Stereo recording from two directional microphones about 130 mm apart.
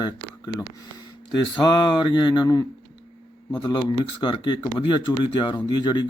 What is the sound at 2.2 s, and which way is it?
Speech, 35° left (ahead or behind).